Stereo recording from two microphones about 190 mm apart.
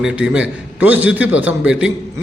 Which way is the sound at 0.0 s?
5° right (ahead or behind).